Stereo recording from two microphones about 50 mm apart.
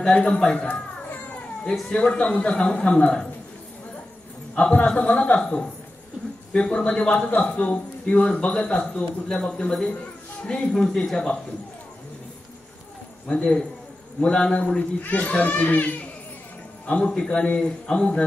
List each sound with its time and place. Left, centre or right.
0.0 s speech: centre
1.9 s a man's voice: left
4.6 s a man's voice: left
5.4 s a man's voice: centre
13.4 s a man's voice: centre